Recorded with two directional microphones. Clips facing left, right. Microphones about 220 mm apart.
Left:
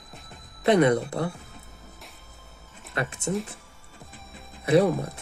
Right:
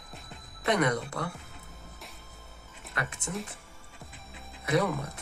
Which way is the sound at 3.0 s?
30° left (ahead or behind).